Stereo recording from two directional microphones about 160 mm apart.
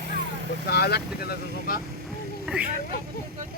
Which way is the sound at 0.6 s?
85° left.